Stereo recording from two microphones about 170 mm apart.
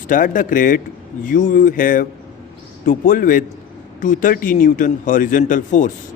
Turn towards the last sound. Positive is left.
turn(degrees=50)  # may be behind; listen again after turning